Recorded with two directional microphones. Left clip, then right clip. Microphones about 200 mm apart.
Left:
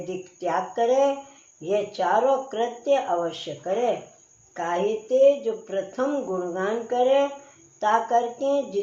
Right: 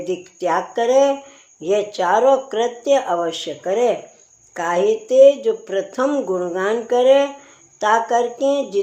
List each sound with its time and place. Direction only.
0.0 s speech: 50° right (ahead or behind)